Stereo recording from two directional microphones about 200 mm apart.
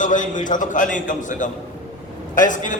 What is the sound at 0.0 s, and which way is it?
A man's voice, 40° left (ahead or behind).